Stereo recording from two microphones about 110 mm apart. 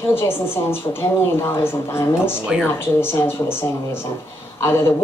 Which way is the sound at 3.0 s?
20° left (ahead or behind).